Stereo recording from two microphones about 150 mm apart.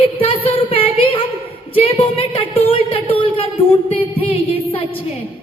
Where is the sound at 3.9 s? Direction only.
40° left (ahead or behind).